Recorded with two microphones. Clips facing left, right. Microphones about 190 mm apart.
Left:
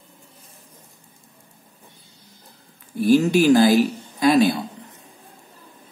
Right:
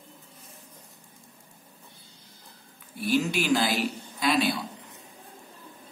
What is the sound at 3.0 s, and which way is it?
Speech, 45° left (ahead or behind).